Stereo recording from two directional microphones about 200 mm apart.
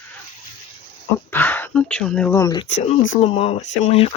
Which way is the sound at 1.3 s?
10° left (ahead or behind).